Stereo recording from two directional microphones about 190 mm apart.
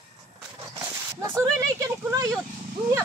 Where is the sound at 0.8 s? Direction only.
15° right (ahead or behind).